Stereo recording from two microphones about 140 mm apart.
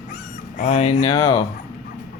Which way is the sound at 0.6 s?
55° left (ahead or behind).